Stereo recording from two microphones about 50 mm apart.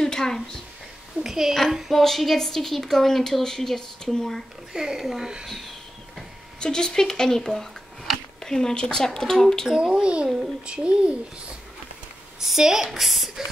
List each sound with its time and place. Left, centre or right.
0.0 s a sound: centre
1.2 s a woman's voice: centre
4.7 s speech: centre
6.6 s speech: centre
9.7 s a child's voice: centre
12.4 s speech: centre